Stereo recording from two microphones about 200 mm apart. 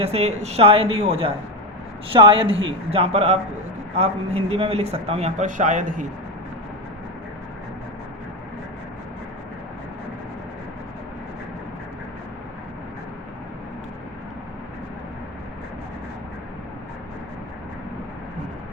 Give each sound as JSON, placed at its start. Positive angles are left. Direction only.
{"t": 0.0, "sound": "a man's voice", "side_deg": -30}
{"t": 2.1, "sound": "speech", "side_deg": -25}
{"t": 2.5, "sound": "speech", "side_deg": -75}
{"t": 2.9, "sound": "a man's voice", "side_deg": -30}